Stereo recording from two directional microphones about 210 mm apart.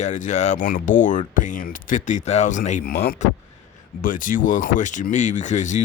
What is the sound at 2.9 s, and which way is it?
Speech, 50° left (ahead or behind).